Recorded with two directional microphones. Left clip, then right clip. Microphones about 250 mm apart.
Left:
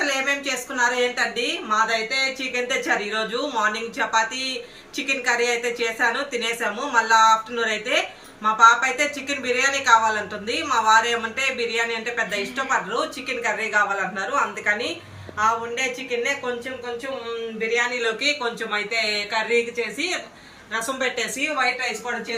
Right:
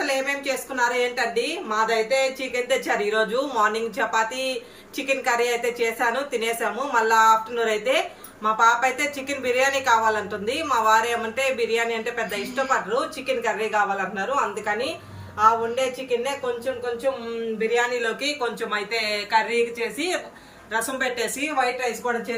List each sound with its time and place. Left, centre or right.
0.0 s a sound: centre
1.7 s a woman's voice: centre
17.9 s speech: centre